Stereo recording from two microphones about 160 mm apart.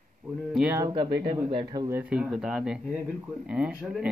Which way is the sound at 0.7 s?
25° right (ahead or behind).